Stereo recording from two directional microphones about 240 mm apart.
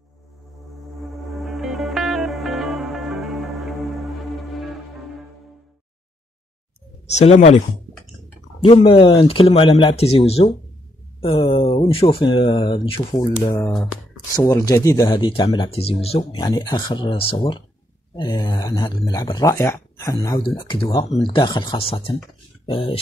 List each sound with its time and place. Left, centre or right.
1.0 s music: centre
7.1 s speech: left
8.6 s speech: left